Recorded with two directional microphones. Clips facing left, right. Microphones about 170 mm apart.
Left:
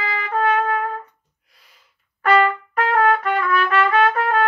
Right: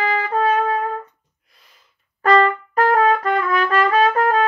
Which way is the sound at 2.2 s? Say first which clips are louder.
Right 2 dB; 35° right (ahead or behind).